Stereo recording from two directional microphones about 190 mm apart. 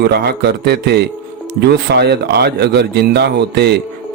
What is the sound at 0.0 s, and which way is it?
Music, 60° right (ahead or behind).